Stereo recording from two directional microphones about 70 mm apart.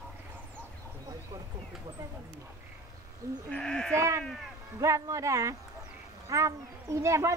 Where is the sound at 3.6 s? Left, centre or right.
Centre.